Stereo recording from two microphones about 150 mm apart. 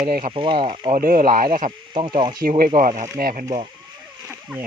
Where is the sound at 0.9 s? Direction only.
70° right (ahead or behind).